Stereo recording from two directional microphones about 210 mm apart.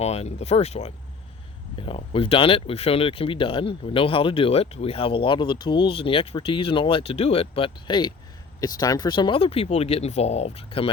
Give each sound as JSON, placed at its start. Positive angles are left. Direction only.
{"t": 0.0, "sound": "speech", "side_deg": 30}